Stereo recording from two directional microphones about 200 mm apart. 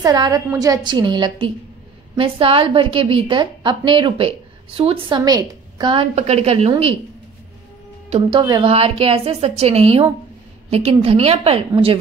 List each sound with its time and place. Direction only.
0.0 s a woman's voice: 20° right (ahead or behind)
8.1 s a woman's voice: 25° right (ahead or behind)